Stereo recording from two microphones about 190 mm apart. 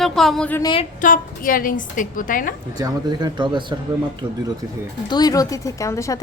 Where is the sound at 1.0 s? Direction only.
45° left (ahead or behind).